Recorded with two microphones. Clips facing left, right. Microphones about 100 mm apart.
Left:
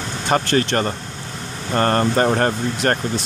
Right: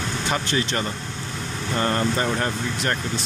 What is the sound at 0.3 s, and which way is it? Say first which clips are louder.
Speech: left 8 dB; 55° left (ahead or behind).